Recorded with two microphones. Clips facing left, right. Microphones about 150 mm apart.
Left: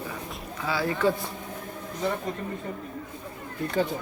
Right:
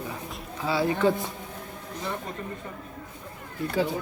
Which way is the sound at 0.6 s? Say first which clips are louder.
Right 2 dB; 25° right (ahead or behind).